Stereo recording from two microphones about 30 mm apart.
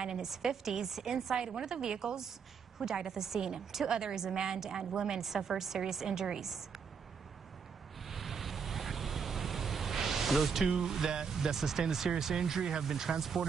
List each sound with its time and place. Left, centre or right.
0.2 s speech: centre
1.3 s a woman's voice: right
5.2 s speech: centre
6.0 s a woman's voice: right
8.1 s waves: centre
10.8 s a woman's voice: centre
11.5 s speech: centre